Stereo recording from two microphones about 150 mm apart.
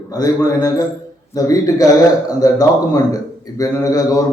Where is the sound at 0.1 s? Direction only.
25° left (ahead or behind).